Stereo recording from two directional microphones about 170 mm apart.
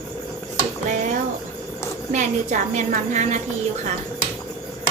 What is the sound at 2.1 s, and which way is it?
A woman's voice, 45° right (ahead or behind).